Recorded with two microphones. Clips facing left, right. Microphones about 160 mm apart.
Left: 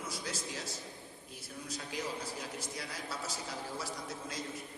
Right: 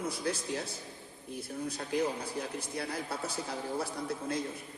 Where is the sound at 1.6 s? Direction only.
55° right (ahead or behind).